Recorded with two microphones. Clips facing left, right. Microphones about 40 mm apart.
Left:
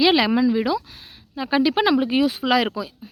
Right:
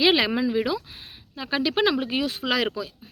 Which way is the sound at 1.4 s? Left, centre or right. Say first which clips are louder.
Left 4 dB; centre.